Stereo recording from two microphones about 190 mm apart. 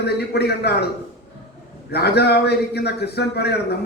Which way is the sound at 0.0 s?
60° left (ahead or behind).